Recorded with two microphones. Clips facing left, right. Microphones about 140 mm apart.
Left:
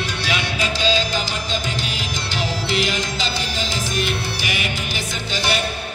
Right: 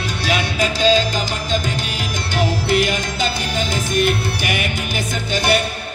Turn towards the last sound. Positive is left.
turn(degrees=-50)  # may be behind; listen again after turning